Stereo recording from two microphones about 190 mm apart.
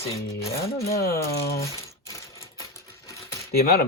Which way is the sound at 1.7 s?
15° left (ahead or behind).